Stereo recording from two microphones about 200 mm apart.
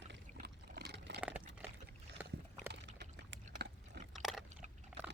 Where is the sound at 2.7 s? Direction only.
65° right (ahead or behind).